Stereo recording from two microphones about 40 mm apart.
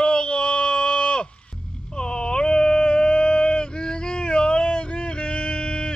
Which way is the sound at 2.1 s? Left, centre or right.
Left.